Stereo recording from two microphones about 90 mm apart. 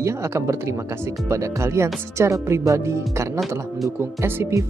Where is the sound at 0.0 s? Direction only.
30° right (ahead or behind).